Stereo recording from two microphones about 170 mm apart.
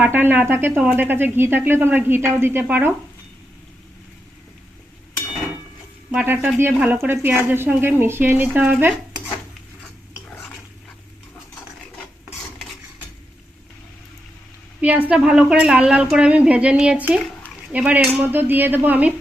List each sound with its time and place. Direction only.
0.0 s speech: 10° right (ahead or behind)
6.1 s speech: 10° right (ahead or behind)
14.8 s speech: 10° right (ahead or behind)